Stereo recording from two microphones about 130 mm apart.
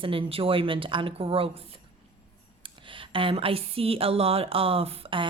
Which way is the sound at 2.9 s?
40° right (ahead or behind).